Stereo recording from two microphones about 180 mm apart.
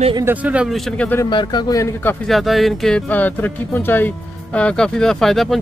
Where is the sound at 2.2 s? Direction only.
Centre (ahead or behind).